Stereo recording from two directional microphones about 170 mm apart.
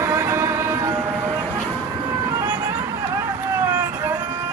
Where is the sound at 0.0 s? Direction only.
15° right (ahead or behind).